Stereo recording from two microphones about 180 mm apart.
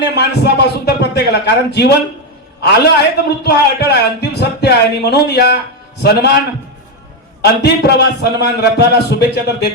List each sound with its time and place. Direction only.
0.0 s a man's voice: 70° left (ahead or behind)
7.4 s a man's voice: 65° left (ahead or behind)